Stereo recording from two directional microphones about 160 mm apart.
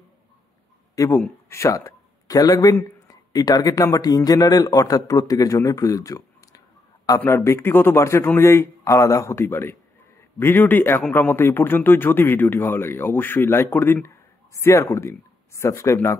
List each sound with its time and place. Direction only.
0.9 s speech: 20° left (ahead or behind)